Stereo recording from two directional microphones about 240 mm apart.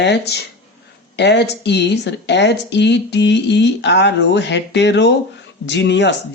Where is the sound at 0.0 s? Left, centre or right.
Left.